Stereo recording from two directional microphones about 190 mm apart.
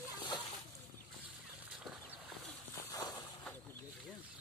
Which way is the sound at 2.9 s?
20° left (ahead or behind).